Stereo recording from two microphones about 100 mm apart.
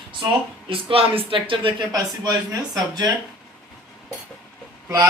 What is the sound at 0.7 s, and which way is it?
Speech, 65° right (ahead or behind).